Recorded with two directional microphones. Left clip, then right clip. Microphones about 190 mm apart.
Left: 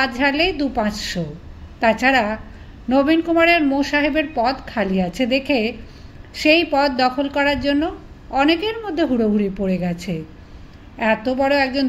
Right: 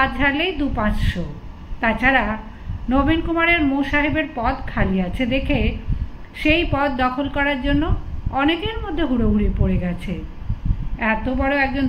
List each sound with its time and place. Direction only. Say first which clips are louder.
0.0 s a woman's voice: left 1 dB; 40° left (ahead or behind)